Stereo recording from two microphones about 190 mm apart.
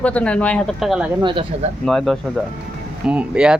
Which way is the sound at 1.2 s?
25° right (ahead or behind).